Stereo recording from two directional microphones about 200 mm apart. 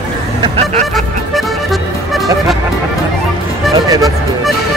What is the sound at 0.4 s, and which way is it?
Vehicle, 30° right (ahead or behind).